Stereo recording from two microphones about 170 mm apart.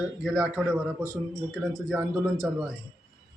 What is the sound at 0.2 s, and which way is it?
Speech, centre (ahead or behind).